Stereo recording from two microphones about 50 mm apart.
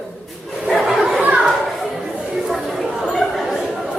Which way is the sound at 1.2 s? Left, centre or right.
Right.